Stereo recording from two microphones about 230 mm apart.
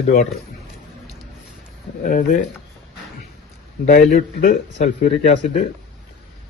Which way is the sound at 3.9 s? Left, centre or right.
Left.